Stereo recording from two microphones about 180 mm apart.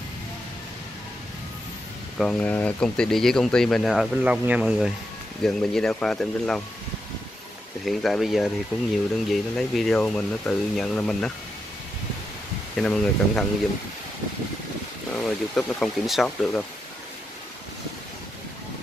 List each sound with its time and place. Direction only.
2.1 s speech: 5° left (ahead or behind)
7.8 s speech: centre (ahead or behind)
12.7 s speech: 5° left (ahead or behind)
15.2 s speech: centre (ahead or behind)